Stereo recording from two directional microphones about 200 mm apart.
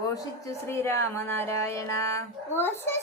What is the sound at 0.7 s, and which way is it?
Speech, 15° left (ahead or behind).